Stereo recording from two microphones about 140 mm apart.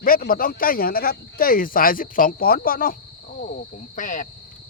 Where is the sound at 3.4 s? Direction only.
75° left (ahead or behind).